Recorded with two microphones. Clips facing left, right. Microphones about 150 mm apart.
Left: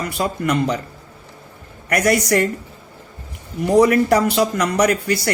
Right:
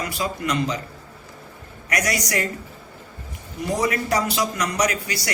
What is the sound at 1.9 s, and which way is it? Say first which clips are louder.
Speech: left 8 dB; 55° left (ahead or behind).